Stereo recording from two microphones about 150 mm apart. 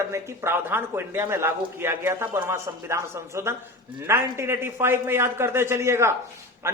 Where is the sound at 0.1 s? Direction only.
20° right (ahead or behind).